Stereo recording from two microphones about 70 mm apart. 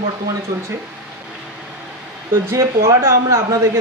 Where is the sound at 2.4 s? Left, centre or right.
Right.